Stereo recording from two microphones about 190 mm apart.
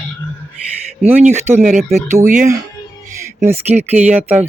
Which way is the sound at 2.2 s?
45° right (ahead or behind).